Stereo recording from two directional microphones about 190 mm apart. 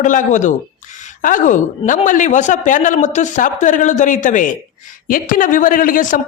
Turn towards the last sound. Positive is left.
turn(degrees=45)  # may be behind; listen again after turning